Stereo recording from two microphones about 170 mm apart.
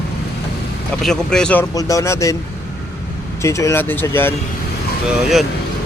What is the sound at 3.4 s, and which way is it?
Speech, 15° left (ahead or behind).